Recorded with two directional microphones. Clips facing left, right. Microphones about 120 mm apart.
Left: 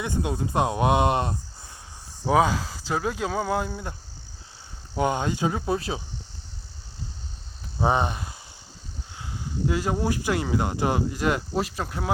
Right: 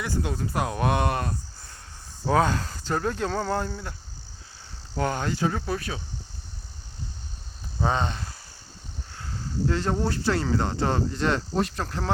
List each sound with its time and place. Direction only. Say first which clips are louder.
0.0 s speech: left 2 dB; 20° left (ahead or behind)
2.2 s speech: left 2 dB; 10° left (ahead or behind)
4.9 s speech: left 2 dB; 20° left (ahead or behind)
7.8 s speech: left 3 dB; 15° left (ahead or behind)